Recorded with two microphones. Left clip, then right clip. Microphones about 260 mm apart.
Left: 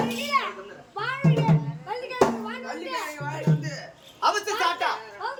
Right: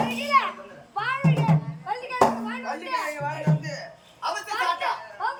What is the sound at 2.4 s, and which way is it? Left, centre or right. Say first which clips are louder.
Music: right 3 dB; centre.